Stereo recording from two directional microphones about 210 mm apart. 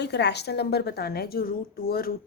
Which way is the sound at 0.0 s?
55° left (ahead or behind).